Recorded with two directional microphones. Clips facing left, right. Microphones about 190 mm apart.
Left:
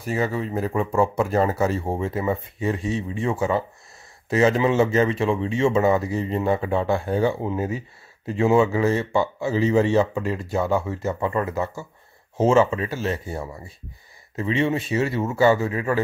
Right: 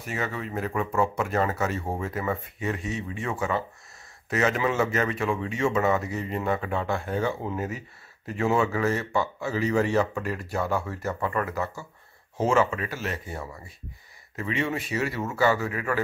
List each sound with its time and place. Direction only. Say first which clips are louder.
0.0 s speech: left 7 dB; 35° left (ahead or behind)